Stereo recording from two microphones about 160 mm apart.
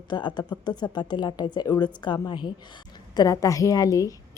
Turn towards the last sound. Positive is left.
turn(degrees=20)  # may be behind; listen again after turning